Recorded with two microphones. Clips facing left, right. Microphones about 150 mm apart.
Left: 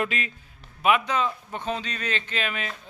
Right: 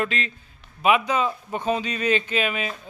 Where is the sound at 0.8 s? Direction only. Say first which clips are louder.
Right 2 dB; 5° right (ahead or behind).